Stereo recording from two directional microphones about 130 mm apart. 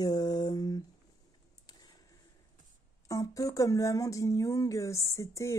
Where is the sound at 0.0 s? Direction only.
30° left (ahead or behind).